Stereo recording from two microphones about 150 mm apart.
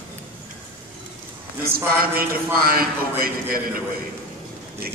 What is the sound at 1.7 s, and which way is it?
A man's voice, 75° right (ahead or behind).